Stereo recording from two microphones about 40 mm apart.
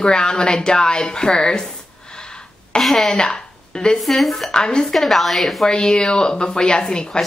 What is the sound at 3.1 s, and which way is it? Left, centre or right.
Speech, centre.